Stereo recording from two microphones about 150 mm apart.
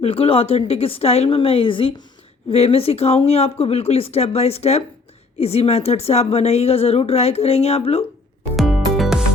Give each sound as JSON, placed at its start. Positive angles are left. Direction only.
{"t": 0.0, "sound": "a woman's voice", "side_deg": 40}
{"t": 8.5, "sound": "music", "side_deg": 0}